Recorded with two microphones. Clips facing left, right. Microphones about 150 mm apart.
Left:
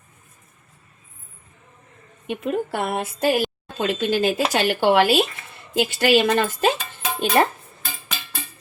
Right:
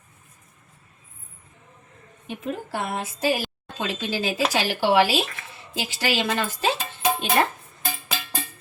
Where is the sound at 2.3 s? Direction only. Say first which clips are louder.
Left 6 dB; 65° left (ahead or behind).